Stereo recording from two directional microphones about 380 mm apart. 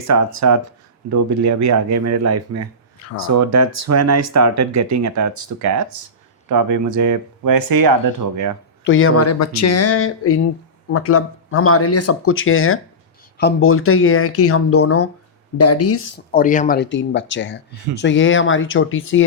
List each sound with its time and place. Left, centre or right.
0.1 s speech: right
8.8 s speech: left
16.3 s speech: left